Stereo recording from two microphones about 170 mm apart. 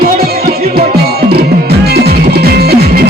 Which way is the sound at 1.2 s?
70° right (ahead or behind).